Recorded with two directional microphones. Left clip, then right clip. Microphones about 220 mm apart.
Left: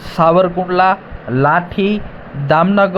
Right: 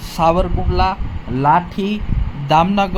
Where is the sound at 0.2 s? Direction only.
15° left (ahead or behind).